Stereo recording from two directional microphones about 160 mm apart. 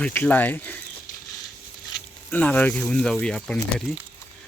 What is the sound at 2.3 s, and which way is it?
Speech, 10° left (ahead or behind).